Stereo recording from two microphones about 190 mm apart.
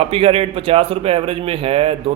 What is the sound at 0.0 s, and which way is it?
A man's voice, 30° right (ahead or behind).